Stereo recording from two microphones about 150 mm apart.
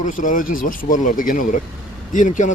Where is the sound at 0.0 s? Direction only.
60° left (ahead or behind).